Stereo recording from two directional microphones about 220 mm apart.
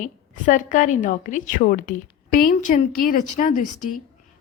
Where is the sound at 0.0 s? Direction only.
35° left (ahead or behind).